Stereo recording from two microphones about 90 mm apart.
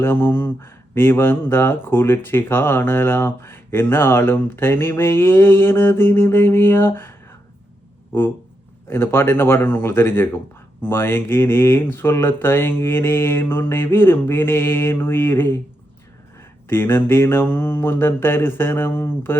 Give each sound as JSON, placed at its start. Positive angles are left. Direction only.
{"t": 0.0, "sound": "speech", "side_deg": 25}
{"t": 8.9, "sound": "speech", "side_deg": 25}
{"t": 16.6, "sound": "speech", "side_deg": 25}